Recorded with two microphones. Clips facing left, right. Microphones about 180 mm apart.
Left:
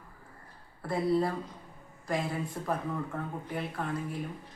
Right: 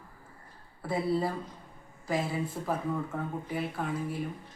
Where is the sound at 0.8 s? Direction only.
Centre (ahead or behind).